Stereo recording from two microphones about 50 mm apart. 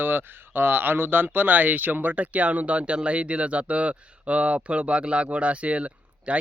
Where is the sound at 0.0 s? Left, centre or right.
Right.